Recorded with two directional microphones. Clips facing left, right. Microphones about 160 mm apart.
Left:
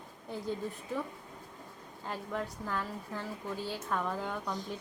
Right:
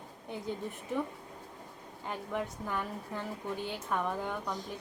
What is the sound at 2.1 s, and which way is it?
A woman's voice, 15° right (ahead or behind).